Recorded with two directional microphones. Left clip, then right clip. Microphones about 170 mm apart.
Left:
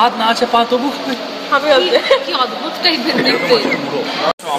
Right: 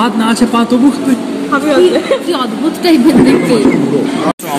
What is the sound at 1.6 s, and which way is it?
Speech, 60° left (ahead or behind).